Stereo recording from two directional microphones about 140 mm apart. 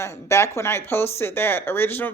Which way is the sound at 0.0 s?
20° left (ahead or behind).